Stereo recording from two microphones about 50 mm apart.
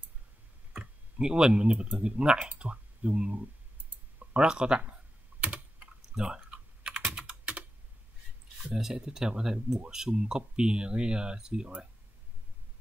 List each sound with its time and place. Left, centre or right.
0.7 s tick: centre
2.0 s speech: centre
5.4 s typing: right
6.1 s speech: centre
6.5 s typing: centre
8.7 s speech: centre